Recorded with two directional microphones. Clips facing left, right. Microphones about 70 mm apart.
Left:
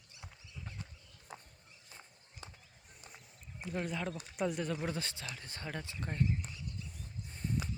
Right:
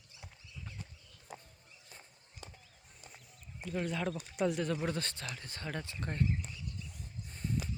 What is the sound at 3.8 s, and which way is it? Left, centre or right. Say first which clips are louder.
Speech: right 3 dB; centre.